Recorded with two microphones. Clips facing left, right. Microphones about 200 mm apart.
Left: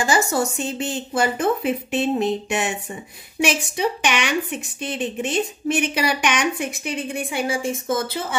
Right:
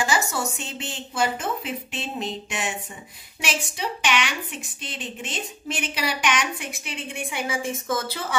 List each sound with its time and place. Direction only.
0.0 s a woman's voice: 45° left (ahead or behind); by 8.4 s 25° left (ahead or behind)